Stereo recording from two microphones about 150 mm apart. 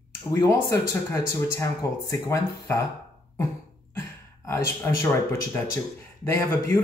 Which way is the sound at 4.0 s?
20° left (ahead or behind).